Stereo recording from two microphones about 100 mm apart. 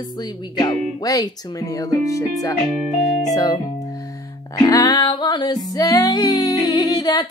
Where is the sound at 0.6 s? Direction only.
40° left (ahead or behind).